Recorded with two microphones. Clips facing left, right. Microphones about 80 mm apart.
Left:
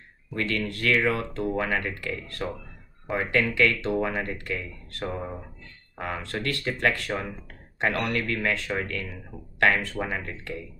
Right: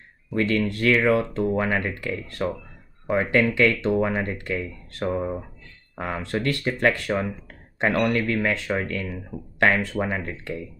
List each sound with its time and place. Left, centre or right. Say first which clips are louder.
0.3 s speech: right 6 dB; centre